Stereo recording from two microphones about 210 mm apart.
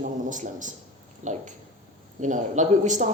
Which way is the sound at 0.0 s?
35° right (ahead or behind).